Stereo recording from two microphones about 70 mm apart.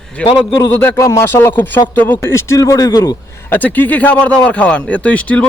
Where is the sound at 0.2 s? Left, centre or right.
Left.